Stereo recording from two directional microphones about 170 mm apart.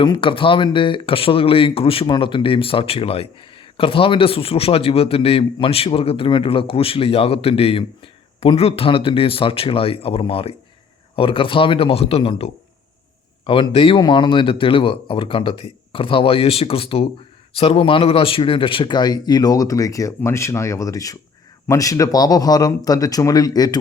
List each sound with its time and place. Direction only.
0.0 s speech: 30° left (ahead or behind)